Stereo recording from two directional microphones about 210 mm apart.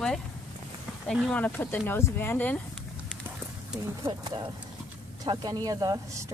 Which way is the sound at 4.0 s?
20° right (ahead or behind).